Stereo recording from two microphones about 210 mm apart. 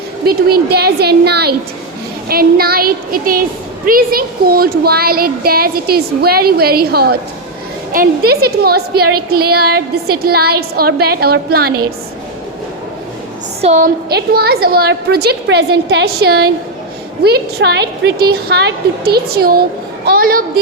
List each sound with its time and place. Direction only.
0.3 s a woman's voice: 50° right (ahead or behind)
13.6 s a woman's voice: 35° right (ahead or behind)